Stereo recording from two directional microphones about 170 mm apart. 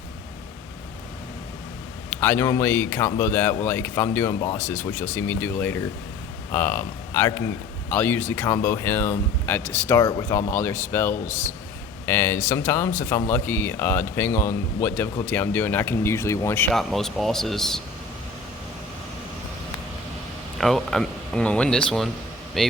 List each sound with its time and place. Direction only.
2.2 s speech: 15° left (ahead or behind)
16.7 s speech: centre (ahead or behind)
20.6 s speech: centre (ahead or behind)